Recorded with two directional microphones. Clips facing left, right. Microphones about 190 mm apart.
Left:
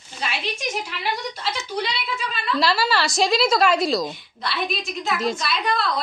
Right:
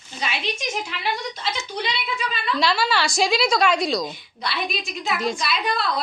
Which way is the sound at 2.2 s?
Centre (ahead or behind).